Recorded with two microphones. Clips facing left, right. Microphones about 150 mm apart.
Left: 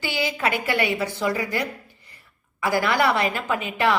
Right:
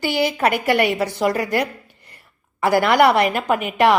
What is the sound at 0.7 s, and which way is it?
A woman's voice, 60° right (ahead or behind).